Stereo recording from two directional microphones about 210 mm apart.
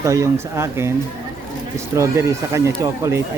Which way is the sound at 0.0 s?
15° right (ahead or behind).